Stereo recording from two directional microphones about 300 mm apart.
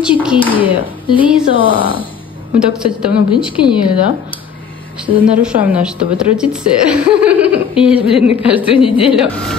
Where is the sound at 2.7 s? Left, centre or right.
Centre.